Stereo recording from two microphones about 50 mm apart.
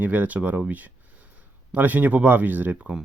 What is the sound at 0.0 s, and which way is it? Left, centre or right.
Speech, right.